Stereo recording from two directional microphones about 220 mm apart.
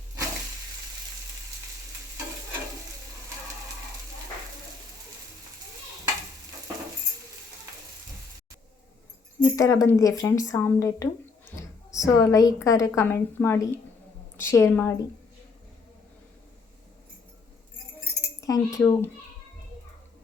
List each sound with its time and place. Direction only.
9.4 s speech: 15° left (ahead or behind)
18.3 s speech: 15° left (ahead or behind)